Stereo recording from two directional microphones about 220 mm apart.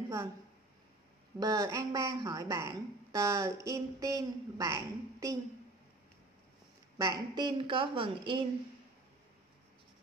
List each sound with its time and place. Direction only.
1.4 s speech: 15° right (ahead or behind)
7.0 s a woman's voice: 20° right (ahead or behind)